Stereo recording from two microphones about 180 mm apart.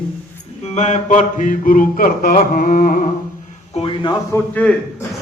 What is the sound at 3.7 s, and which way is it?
Speech, 30° left (ahead or behind).